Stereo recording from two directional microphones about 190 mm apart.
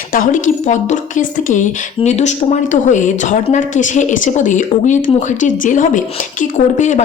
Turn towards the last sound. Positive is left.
turn(degrees=40)  # may be behind; listen again after turning